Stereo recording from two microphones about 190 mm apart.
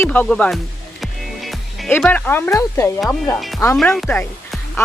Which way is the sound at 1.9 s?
10° left (ahead or behind).